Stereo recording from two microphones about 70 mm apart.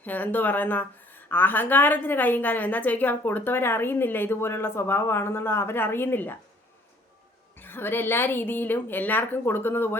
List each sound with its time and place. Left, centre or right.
0.0 s a woman's voice: left
7.5 s a woman's voice: left